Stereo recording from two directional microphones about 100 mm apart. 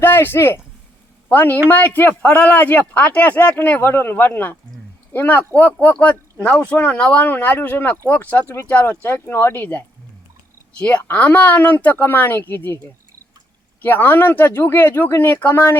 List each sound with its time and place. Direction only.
0.0 s speech: 20° left (ahead or behind)
13.8 s speech: 20° left (ahead or behind)